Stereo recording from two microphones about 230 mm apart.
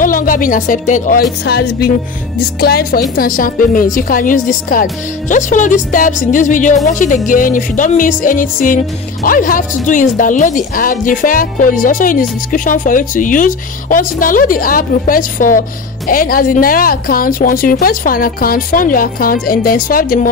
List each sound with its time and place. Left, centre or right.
0.0 s speech: left